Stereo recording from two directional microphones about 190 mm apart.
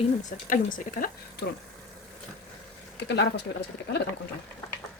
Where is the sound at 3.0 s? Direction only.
65° left (ahead or behind).